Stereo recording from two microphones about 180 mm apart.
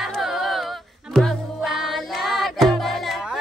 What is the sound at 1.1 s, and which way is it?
Music, centre (ahead or behind).